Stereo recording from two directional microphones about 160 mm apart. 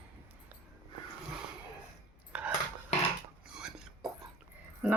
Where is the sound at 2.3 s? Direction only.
10° right (ahead or behind).